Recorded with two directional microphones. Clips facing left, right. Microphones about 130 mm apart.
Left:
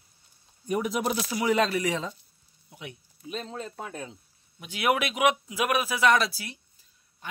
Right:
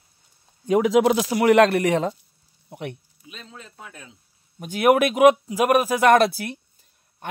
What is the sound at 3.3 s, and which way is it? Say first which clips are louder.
Speech: left 8 dB; 35° left (ahead or behind).